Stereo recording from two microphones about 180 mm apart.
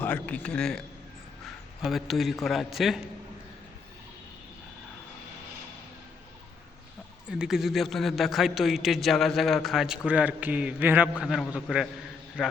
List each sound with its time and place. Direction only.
0.0 s a man's voice: 10° left (ahead or behind)
7.3 s a man's voice: 5° right (ahead or behind)